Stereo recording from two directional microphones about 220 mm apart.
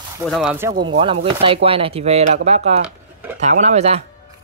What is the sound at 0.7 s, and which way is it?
Speech, 55° right (ahead or behind).